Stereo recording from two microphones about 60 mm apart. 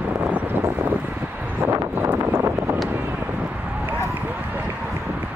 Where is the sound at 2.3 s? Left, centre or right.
Right.